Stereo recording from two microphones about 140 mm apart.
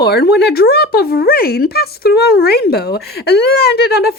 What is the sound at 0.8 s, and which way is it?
Speech, 90° left.